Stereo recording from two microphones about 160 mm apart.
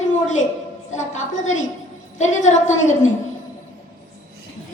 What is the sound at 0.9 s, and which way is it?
A woman's voice, 50° left (ahead or behind).